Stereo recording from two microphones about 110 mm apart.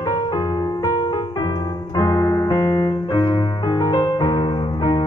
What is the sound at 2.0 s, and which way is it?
Piano, 35° left (ahead or behind).